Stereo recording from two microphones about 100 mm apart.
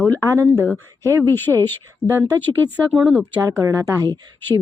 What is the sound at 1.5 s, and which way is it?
Speech, 5° right (ahead or behind).